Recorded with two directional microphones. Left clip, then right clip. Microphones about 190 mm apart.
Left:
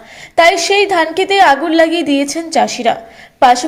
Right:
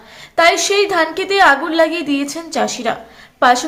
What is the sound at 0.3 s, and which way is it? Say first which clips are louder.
A woman's voice: left 3 dB; 10° left (ahead or behind).